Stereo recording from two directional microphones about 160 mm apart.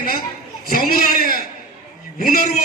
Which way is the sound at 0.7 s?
65° left (ahead or behind).